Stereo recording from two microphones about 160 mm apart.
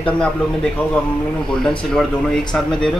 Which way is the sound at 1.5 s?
5° left (ahead or behind).